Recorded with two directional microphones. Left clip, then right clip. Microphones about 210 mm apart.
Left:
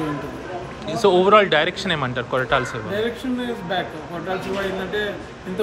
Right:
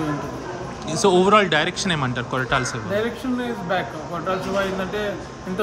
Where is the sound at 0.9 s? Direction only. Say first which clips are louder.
Left 1 dB; 20° right (ahead or behind).